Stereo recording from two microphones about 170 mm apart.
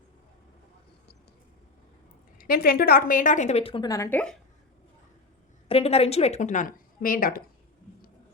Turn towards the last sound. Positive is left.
turn(degrees=55)  # may be behind; listen again after turning